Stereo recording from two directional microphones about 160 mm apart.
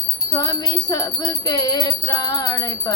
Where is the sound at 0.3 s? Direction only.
25° left (ahead or behind).